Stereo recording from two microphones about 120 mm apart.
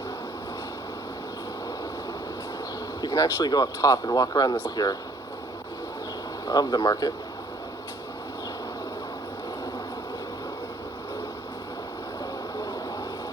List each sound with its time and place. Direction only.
3.0 s speech: 30° left (ahead or behind)
6.5 s speech: 35° left (ahead or behind)